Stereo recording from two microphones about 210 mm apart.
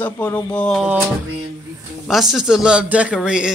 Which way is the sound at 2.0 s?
Centre (ahead or behind).